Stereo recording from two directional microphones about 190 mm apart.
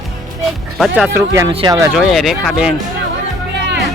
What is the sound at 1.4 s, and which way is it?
Speech, 25° right (ahead or behind).